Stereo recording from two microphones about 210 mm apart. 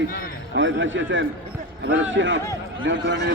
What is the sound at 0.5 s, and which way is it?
A man's voice, 65° right (ahead or behind).